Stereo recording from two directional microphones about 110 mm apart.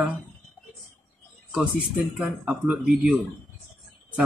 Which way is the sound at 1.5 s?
10° right (ahead or behind).